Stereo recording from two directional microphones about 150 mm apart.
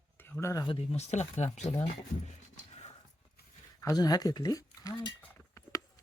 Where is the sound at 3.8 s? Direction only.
25° left (ahead or behind).